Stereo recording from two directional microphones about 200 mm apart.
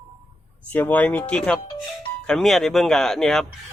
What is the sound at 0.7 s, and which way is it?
Speech, 10° left (ahead or behind).